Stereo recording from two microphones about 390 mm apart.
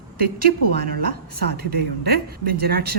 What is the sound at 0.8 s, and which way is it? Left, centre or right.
Speech, right.